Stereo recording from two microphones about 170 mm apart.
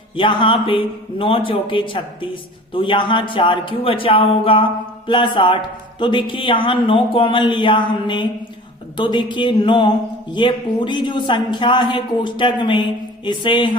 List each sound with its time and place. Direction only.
0.2 s a man's voice: 30° left (ahead or behind)